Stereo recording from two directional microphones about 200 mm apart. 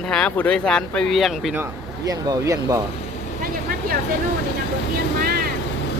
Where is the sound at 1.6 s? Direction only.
15° right (ahead or behind).